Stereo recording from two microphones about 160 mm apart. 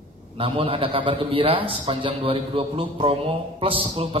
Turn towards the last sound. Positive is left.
turn(degrees=-35)  # may be behind; listen again after turning